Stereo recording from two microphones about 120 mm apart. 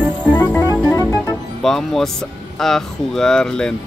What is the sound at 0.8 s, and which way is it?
Music, 25° left (ahead or behind).